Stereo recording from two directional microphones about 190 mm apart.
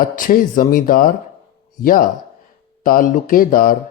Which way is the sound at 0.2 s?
45° left (ahead or behind).